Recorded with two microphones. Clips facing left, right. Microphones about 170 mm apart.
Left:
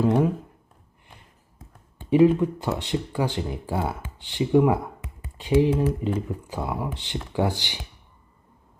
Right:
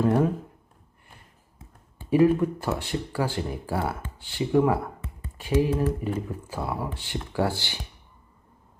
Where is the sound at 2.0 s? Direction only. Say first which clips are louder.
Left 2 dB; 20° left (ahead or behind).